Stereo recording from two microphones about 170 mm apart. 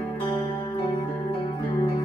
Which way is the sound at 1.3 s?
30° left (ahead or behind).